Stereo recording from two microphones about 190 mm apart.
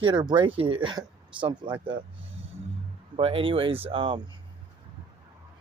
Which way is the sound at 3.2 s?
30° right (ahead or behind).